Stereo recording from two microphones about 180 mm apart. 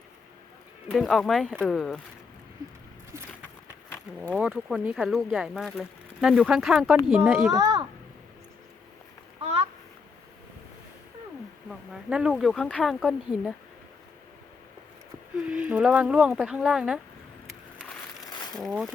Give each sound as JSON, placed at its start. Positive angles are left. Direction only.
{"t": 0.9, "sound": "speech", "side_deg": 0}
{"t": 4.4, "sound": "speech", "side_deg": -5}
{"t": 7.5, "sound": "a child's voice", "side_deg": -20}
{"t": 9.4, "sound": "a sound", "side_deg": -30}
{"t": 11.7, "sound": "speech", "side_deg": -5}
{"t": 15.4, "sound": "speech", "side_deg": -5}
{"t": 18.5, "sound": "speech", "side_deg": 0}